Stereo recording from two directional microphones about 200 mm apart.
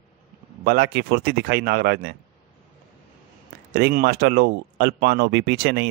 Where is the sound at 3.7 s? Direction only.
50° right (ahead or behind).